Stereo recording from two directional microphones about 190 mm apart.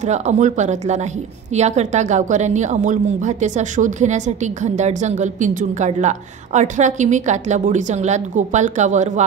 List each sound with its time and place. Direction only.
0.0 s a woman's voice: 35° right (ahead or behind)